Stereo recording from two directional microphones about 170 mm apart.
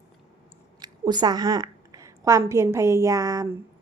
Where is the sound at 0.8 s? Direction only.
25° right (ahead or behind).